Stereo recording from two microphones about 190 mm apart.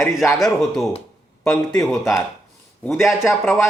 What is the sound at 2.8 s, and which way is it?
Speech, centre (ahead or behind).